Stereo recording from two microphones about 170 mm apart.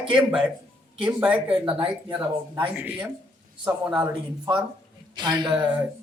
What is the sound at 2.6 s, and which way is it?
Speech, 10° right (ahead or behind).